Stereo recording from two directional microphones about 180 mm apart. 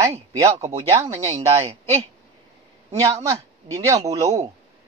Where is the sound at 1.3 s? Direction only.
35° right (ahead or behind).